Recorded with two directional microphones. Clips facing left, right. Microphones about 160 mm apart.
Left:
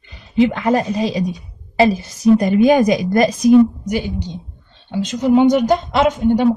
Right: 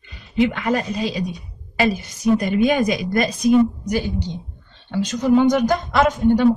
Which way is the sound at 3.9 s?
20° left (ahead or behind).